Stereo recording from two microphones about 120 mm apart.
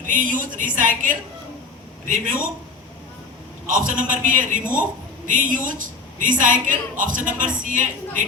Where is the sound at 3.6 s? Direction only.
90° right.